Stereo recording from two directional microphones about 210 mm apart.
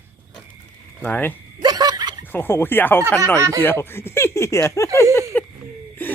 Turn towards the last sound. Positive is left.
turn(degrees=10)  # may be behind; listen again after turning